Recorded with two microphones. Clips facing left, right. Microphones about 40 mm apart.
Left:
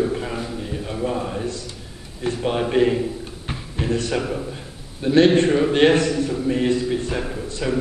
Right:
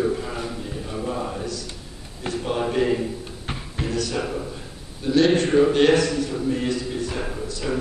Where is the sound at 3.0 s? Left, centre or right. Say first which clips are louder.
Left 3 dB; centre.